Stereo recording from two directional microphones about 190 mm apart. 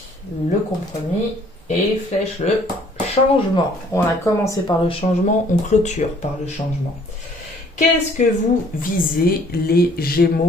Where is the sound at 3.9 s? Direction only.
15° left (ahead or behind).